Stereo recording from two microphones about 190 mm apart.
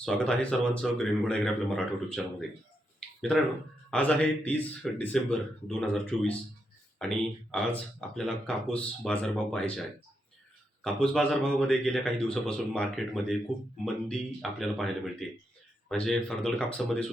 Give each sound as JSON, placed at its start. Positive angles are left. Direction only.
{"t": 0.0, "sound": "a man's voice", "side_deg": 5}
{"t": 10.8, "sound": "a man's voice", "side_deg": 5}